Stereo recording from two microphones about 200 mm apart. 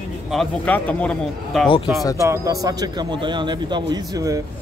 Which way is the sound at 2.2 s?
15° right (ahead or behind).